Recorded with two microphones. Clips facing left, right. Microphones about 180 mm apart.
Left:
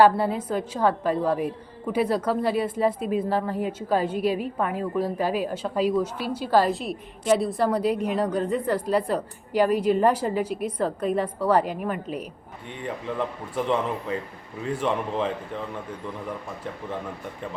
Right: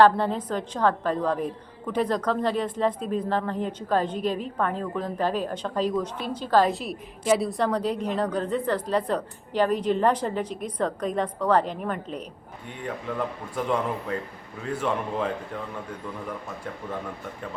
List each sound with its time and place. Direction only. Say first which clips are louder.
0.0 s a woman's voice: even; 10° left (ahead or behind)
13.1 s speech: left 3 dB; 5° right (ahead or behind)
13.7 s a woman's voice: left 1 dB; 5° left (ahead or behind)
14.8 s a man's voice: left 1 dB; 5° right (ahead or behind)